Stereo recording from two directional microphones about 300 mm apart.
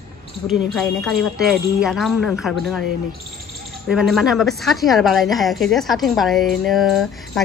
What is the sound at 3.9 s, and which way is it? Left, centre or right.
A woman's voice, centre.